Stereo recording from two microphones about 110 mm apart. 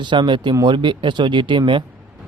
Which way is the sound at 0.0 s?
45° right (ahead or behind).